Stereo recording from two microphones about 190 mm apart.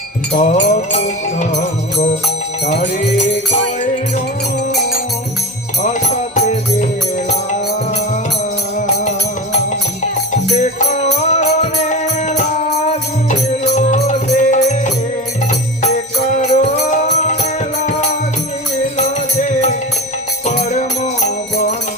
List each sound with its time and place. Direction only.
0.3 s music: 40° left (ahead or behind)
5.8 s music: 40° left (ahead or behind)
10.3 s music: 40° left (ahead or behind)
15.8 s music: 40° left (ahead or behind)
18.9 s music: 40° left (ahead or behind)